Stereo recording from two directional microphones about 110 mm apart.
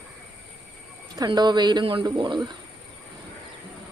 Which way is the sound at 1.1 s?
40° right (ahead or behind).